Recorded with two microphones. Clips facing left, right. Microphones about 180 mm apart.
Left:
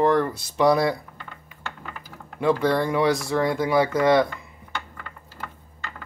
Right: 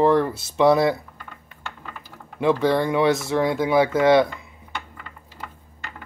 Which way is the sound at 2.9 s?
25° right (ahead or behind).